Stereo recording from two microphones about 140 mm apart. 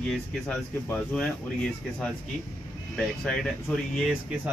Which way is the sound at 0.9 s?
5° left (ahead or behind).